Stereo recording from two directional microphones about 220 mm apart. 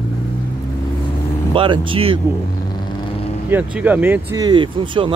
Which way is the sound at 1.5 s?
25° right (ahead or behind).